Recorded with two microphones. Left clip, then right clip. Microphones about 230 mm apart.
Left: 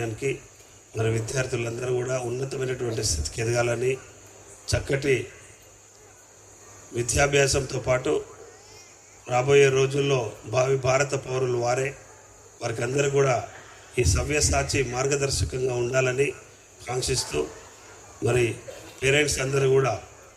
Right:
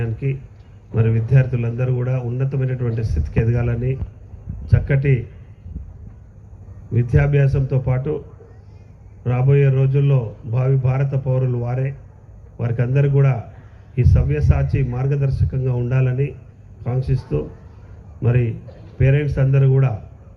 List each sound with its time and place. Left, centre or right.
1.0 s a man's voice: left
6.9 s a man's voice: left
9.3 s a man's voice: left